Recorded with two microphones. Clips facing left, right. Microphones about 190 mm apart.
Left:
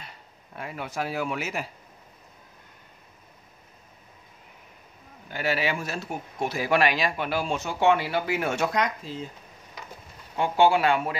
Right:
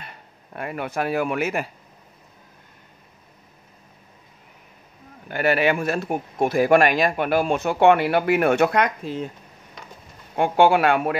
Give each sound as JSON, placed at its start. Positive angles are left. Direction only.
{"t": 0.0, "sound": "speech", "side_deg": -60}
{"t": 5.3, "sound": "speech", "side_deg": -60}
{"t": 10.3, "sound": "speech", "side_deg": -55}